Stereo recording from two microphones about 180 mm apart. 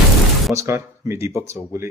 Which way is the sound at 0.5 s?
15° right (ahead or behind).